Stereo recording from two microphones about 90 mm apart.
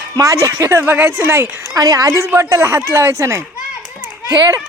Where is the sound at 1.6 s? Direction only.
40° right (ahead or behind).